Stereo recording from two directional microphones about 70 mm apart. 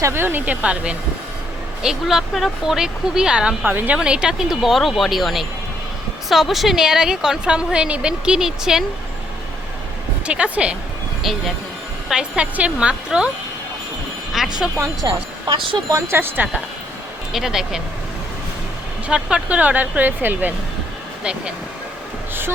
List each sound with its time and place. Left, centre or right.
0.0 s speech: right; by 0.9 s centre
1.8 s a woman's voice: centre
3.6 s speech: right
3.9 s a woman's voice: centre
10.2 s a woman's voice: centre
11.2 s a woman's voice: centre
14.3 s a woman's voice: centre
15.0 s speech: right
16.0 s speech: right
17.3 s a woman's voice: centre
19.0 s speech: centre